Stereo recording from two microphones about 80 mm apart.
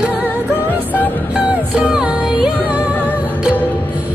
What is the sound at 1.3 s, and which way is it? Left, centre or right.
Music, centre.